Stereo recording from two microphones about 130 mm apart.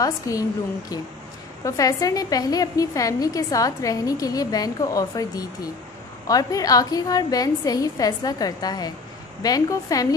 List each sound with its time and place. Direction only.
0.0 s a woman's voice: 25° left (ahead or behind)